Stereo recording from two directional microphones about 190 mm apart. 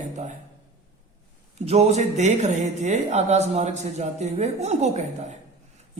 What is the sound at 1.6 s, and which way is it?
Speech, 35° right (ahead or behind).